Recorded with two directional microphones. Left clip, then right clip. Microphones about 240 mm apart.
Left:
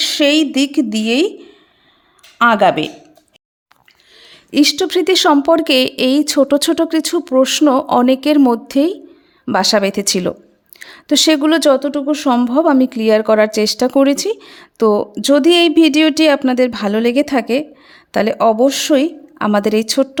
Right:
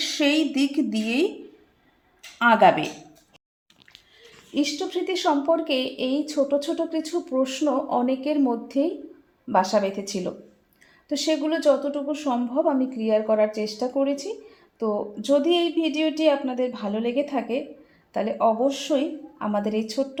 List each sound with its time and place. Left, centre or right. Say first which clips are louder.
0.0 s a woman's voice: left 9 dB; left
2.4 s a woman's voice: left 6 dB; left
4.5 s a woman's voice: left 13 dB; left